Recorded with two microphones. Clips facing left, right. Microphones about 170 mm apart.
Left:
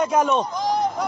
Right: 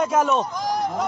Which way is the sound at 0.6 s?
25° left (ahead or behind).